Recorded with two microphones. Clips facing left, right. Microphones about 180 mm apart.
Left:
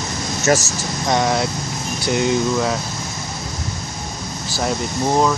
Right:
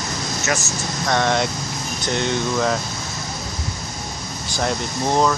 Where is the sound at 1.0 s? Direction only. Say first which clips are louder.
Left 1 dB; 15° left (ahead or behind).